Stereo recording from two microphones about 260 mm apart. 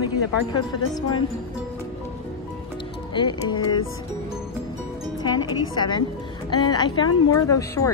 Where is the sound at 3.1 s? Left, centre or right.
Centre.